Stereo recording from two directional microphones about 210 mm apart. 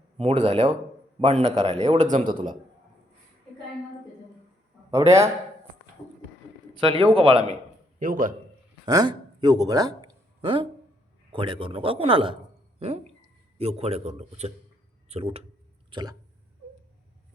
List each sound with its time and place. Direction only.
0.2 s speech: 30° right (ahead or behind)
2.0 s a man's voice: 35° right (ahead or behind)
4.9 s a man's voice: 15° right (ahead or behind)
6.7 s speech: 25° right (ahead or behind)
7.9 s a man's voice: 40° right (ahead or behind)
8.9 s speech: 20° right (ahead or behind)
13.6 s speech: 30° right (ahead or behind)
15.9 s a sound: 20° right (ahead or behind)